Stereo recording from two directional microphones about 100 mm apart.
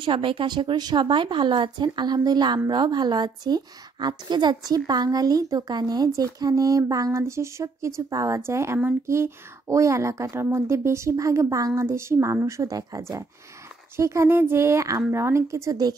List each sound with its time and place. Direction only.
0.0 s a woman's voice: 60° right (ahead or behind); by 16.0 s 40° right (ahead or behind)